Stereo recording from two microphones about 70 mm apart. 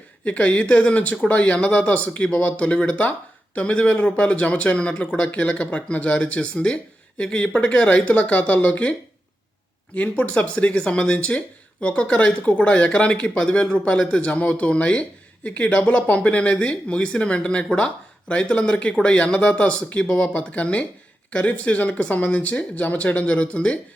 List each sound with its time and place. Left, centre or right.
0.3 s speech: centre